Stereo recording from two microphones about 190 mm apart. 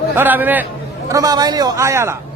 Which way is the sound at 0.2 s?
10° right (ahead or behind).